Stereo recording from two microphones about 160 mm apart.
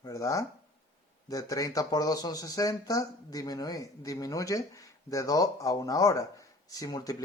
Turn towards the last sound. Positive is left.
turn(degrees=20)  # may be behind; listen again after turning